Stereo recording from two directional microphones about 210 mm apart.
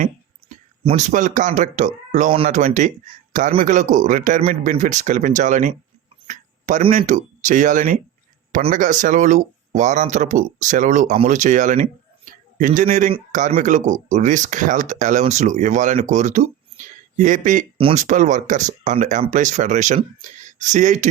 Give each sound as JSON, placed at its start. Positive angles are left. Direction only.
{"t": 0.0, "sound": "speech", "side_deg": -35}